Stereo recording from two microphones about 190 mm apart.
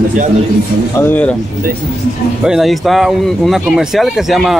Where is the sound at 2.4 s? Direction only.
Centre (ahead or behind).